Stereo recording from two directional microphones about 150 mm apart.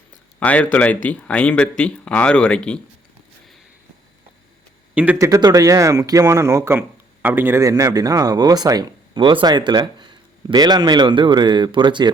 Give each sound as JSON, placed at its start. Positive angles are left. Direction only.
{"t": 0.3, "sound": "speech", "side_deg": 10}
{"t": 5.1, "sound": "speech", "side_deg": -20}